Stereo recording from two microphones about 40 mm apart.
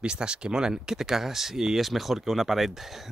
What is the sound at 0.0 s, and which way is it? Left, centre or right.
Speech, right.